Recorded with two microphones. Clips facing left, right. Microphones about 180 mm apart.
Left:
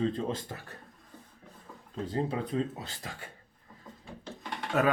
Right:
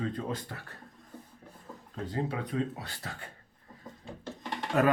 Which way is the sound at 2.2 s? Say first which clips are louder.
Left 1 dB; 25° left (ahead or behind).